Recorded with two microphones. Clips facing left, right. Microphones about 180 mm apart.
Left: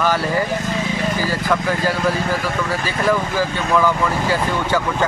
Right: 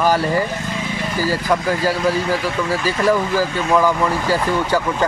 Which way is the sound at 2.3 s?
45° left (ahead or behind).